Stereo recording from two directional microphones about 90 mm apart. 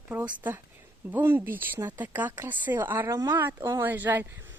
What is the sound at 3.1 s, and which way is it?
Speech, 35° right (ahead or behind).